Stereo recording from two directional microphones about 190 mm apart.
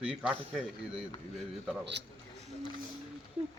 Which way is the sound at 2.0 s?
65° right (ahead or behind).